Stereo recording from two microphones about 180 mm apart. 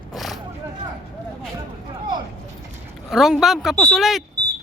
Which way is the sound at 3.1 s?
Centre (ahead or behind).